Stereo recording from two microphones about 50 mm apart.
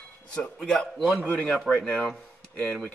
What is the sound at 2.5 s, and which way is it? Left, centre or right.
Speech, left.